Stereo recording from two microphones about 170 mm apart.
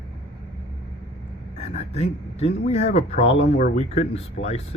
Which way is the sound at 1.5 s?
40° left (ahead or behind).